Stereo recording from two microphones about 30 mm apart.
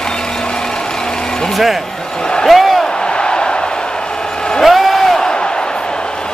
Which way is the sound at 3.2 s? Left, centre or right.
Left.